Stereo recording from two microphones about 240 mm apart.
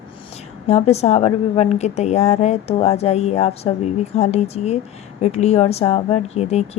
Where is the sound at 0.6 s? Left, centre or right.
Left.